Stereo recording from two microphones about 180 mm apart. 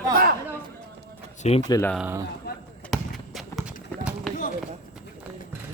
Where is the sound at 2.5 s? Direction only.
60° left (ahead or behind).